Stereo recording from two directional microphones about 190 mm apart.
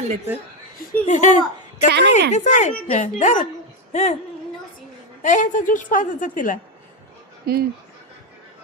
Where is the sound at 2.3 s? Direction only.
40° left (ahead or behind).